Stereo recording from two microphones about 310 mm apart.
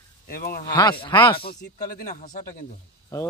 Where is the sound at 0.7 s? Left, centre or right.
Centre.